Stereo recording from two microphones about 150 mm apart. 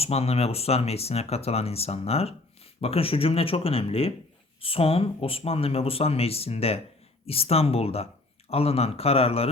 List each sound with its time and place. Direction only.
0.0 s speech: 40° left (ahead or behind)